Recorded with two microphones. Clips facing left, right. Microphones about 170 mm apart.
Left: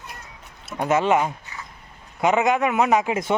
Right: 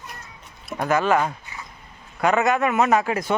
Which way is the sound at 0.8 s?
25° left (ahead or behind).